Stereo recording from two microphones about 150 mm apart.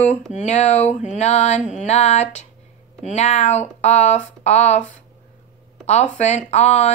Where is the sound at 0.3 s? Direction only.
50° left (ahead or behind).